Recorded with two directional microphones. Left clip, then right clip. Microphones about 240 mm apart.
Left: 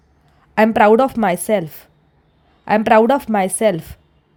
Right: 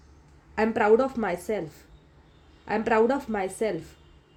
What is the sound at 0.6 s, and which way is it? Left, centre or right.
Speech, left.